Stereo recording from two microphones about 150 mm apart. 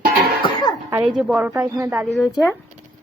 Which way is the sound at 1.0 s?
5° right (ahead or behind).